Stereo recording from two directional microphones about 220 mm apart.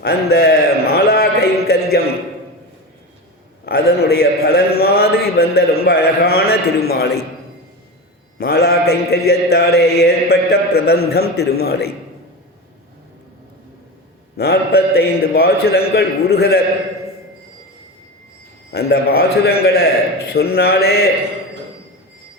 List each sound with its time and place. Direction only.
0.0 s a sound: 45° left (ahead or behind)
3.7 s mantra: 45° left (ahead or behind)
8.4 s mantra: 45° left (ahead or behind)
14.3 s mantra: 45° left (ahead or behind)
18.7 s mantra: 45° left (ahead or behind)